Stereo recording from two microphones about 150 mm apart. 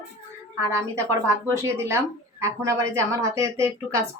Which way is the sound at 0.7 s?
20° right (ahead or behind).